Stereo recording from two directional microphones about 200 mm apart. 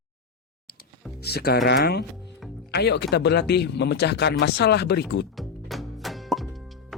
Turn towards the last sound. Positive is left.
turn(degrees=0)  # may be behind; listen again after turning